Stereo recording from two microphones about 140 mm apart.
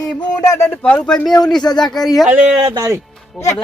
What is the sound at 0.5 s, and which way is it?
Speech, 15° left (ahead or behind).